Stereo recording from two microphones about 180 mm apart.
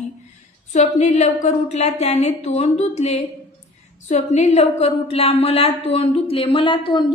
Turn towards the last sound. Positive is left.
turn(degrees=25)  # may be behind; listen again after turning